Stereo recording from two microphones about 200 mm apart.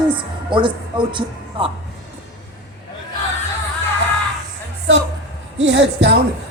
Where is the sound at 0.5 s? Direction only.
25° right (ahead or behind).